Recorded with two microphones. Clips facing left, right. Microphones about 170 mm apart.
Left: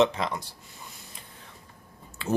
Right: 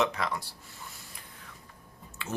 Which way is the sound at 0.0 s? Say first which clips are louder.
Left 5 dB; 25° left (ahead or behind).